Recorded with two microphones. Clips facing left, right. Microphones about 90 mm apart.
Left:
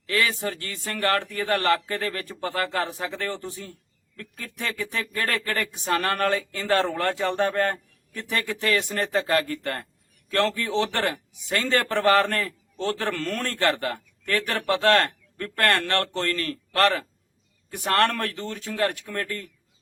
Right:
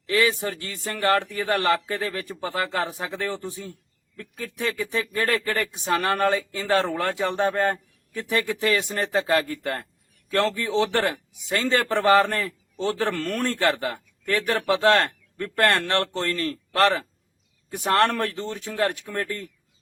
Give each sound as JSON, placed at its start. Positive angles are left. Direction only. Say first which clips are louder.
{"t": 0.1, "sound": "a man's voice", "louder": "right 3 dB", "side_deg": -15}